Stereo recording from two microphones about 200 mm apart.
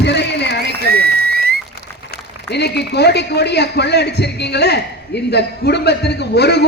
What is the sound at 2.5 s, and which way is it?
A man's voice, 55° left (ahead or behind).